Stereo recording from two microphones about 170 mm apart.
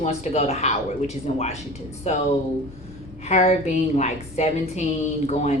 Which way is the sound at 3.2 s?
40° left (ahead or behind).